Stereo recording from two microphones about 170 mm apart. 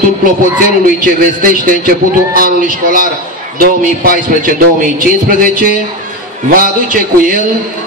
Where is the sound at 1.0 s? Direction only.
55° right (ahead or behind).